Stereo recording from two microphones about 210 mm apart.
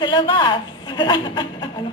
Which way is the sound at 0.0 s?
20° left (ahead or behind).